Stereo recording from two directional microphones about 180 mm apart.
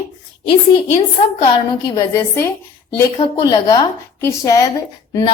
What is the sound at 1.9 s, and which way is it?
A woman's voice, 20° left (ahead or behind).